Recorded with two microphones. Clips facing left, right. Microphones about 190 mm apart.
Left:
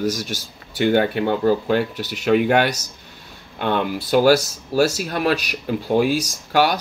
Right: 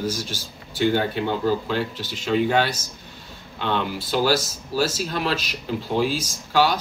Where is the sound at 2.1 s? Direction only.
60° left (ahead or behind).